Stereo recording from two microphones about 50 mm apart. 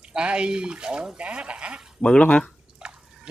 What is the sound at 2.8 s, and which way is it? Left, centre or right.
Drip, centre.